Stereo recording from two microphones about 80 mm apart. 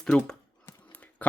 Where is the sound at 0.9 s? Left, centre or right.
Centre.